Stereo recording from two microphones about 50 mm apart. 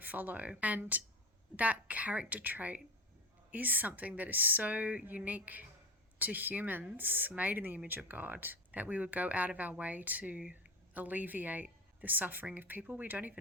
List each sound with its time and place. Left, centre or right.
0.0 s a woman's voice: right